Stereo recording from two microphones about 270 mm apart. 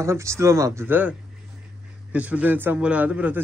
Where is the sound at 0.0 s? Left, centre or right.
Centre.